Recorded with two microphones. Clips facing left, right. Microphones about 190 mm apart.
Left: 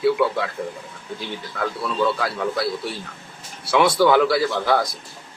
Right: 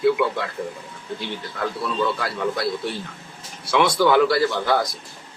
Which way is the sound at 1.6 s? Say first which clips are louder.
Left 1 dB; centre (ahead or behind).